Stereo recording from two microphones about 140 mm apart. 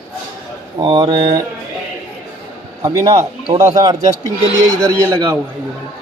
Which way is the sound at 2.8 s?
25° right (ahead or behind).